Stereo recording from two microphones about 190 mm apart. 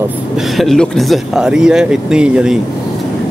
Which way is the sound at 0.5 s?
Centre (ahead or behind).